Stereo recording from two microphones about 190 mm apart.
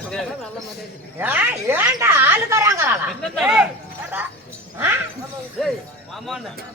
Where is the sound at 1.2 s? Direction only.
10° right (ahead or behind).